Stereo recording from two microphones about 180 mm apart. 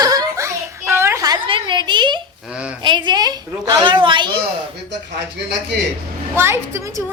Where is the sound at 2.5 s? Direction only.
5° right (ahead or behind).